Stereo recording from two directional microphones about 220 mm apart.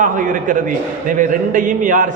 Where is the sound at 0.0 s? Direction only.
35° right (ahead or behind).